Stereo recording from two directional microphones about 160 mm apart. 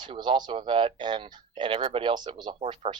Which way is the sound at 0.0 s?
30° right (ahead or behind).